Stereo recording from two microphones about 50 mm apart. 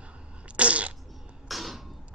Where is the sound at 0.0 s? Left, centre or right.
Right.